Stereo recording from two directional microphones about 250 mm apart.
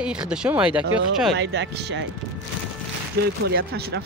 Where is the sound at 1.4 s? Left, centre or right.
Right.